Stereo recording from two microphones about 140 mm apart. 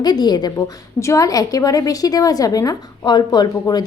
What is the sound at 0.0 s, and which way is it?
A woman's voice, 30° left (ahead or behind).